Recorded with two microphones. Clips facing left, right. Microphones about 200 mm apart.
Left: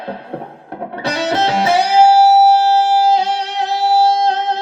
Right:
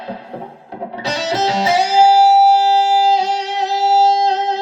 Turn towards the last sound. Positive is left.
turn(degrees=55)  # may be behind; listen again after turning